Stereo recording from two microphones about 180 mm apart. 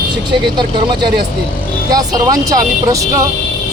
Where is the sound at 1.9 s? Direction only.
20° right (ahead or behind).